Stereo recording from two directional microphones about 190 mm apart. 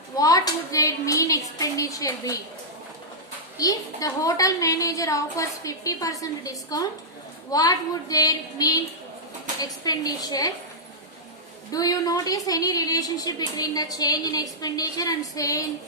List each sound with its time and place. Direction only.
0.2 s a sound: 20° left (ahead or behind)
3.6 s a woman's voice: 20° left (ahead or behind)
11.7 s a woman's voice: 20° left (ahead or behind)